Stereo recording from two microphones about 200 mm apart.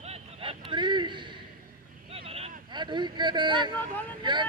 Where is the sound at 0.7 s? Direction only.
25° right (ahead or behind).